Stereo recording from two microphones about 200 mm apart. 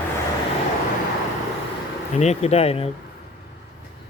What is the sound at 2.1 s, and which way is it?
Speech, 30° left (ahead or behind).